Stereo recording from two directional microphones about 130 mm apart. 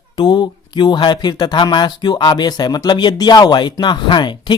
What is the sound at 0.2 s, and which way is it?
Speech, 35° left (ahead or behind).